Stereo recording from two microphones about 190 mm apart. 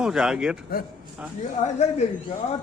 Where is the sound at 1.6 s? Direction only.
35° left (ahead or behind).